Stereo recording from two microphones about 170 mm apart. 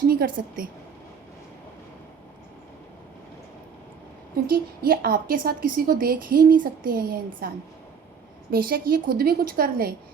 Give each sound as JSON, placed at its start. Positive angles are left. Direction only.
{"t": 0.1, "sound": "a woman's voice", "side_deg": -60}
{"t": 4.4, "sound": "a woman's voice", "side_deg": -60}